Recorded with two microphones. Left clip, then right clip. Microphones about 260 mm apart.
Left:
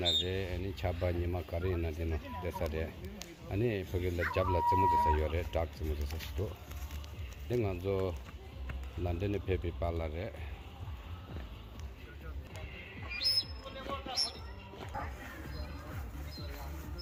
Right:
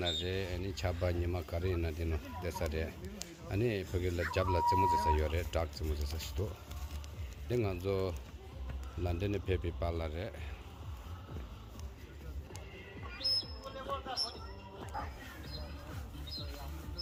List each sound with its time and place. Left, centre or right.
0.0 s speech: centre
7.5 s speech: centre
13.2 s music: left
14.9 s music: left